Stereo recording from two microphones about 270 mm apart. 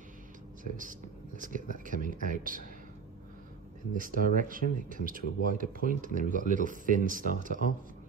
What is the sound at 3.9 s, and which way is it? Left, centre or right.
Speech, right.